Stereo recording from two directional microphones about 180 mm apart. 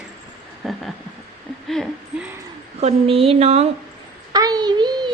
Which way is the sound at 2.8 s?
35° right (ahead or behind).